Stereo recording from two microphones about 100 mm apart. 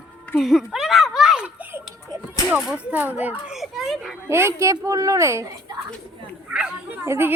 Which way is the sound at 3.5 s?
Centre (ahead or behind).